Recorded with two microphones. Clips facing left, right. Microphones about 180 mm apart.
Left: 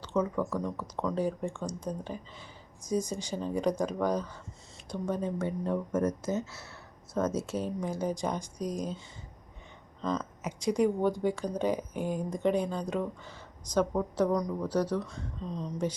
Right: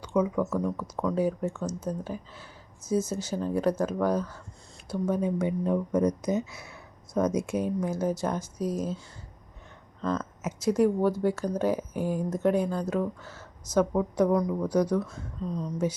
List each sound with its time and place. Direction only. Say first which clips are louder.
0.0 s speech: right 4 dB; 10° right (ahead or behind)
10.0 s speech: right 3 dB; 5° right (ahead or behind)